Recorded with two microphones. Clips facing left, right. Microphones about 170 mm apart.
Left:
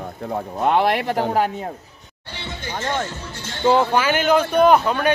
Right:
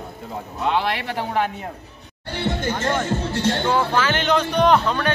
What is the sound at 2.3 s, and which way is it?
Music, 55° right (ahead or behind).